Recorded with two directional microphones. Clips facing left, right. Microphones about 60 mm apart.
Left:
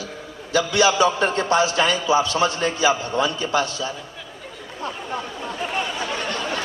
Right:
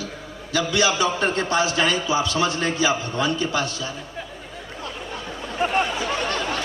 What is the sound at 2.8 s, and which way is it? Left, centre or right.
Speech, left.